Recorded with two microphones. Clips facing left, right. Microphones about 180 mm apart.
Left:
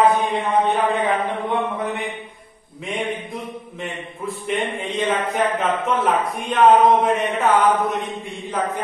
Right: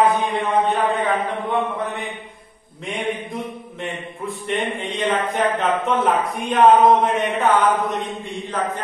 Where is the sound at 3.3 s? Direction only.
Centre (ahead or behind).